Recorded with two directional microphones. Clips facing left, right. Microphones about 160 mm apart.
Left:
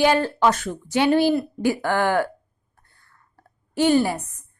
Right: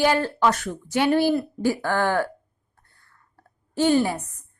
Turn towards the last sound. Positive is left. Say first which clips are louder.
# left 1 dB
turn(degrees=5)  # may be behind; listen again after turning